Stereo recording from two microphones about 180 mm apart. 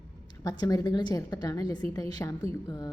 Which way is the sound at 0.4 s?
20° left (ahead or behind).